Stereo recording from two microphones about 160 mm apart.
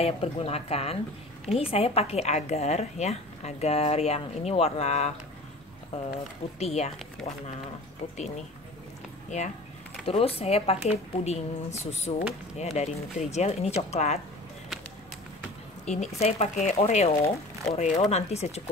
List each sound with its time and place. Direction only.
0.0 s a woman's voice: 40° left (ahead or behind)
6.6 s a woman's voice: 40° left (ahead or behind)
10.0 s a woman's voice: 35° left (ahead or behind)
15.8 s speech: 45° left (ahead or behind)